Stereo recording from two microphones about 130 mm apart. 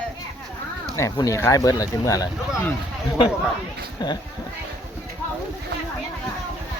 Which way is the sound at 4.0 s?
30° left (ahead or behind).